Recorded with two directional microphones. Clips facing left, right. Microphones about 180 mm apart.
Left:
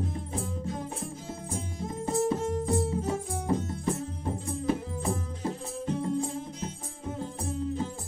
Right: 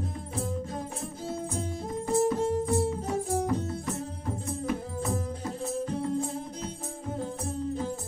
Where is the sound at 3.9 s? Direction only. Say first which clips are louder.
Left 2 dB; 30° left (ahead or behind).